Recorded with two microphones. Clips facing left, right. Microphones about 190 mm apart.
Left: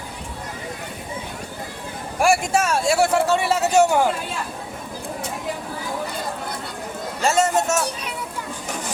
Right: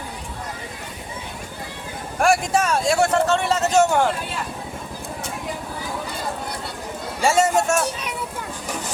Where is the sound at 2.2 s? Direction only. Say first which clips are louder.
Even; 5° left (ahead or behind).